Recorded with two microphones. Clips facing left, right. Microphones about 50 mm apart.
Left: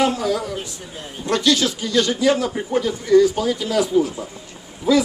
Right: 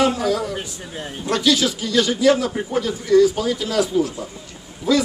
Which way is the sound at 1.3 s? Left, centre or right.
Centre.